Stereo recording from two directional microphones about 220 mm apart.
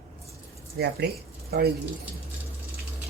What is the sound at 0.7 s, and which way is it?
Speech, 45° right (ahead or behind).